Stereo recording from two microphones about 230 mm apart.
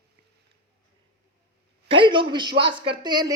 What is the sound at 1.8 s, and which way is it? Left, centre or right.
A woman's voice, right.